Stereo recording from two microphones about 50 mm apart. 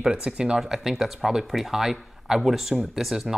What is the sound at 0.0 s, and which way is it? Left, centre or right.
Speech, right.